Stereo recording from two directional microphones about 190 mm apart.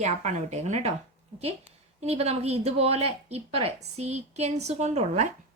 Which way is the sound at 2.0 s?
35° right (ahead or behind).